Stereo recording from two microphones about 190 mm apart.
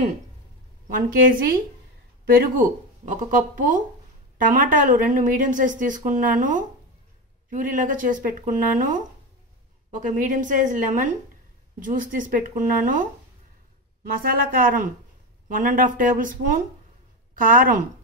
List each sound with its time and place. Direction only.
0.8 s speech: 45° right (ahead or behind)